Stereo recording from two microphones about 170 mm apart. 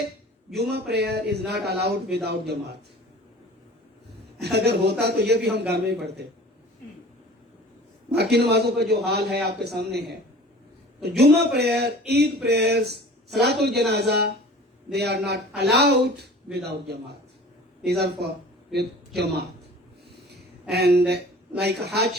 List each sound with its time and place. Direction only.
0.5 s a man's voice: 75° right (ahead or behind)
4.5 s a man's voice: 80° right
8.1 s a man's voice: 75° right (ahead or behind)
11.2 s a man's voice: 75° right (ahead or behind)
20.7 s a man's voice: 75° right (ahead or behind)